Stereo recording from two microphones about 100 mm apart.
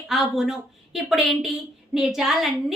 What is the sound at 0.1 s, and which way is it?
A woman's voice, 5° right (ahead or behind).